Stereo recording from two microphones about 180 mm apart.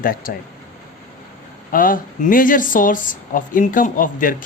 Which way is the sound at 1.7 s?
50° left (ahead or behind).